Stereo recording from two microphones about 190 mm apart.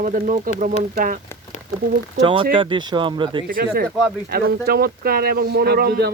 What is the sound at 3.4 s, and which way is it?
Speech, 50° right (ahead or behind).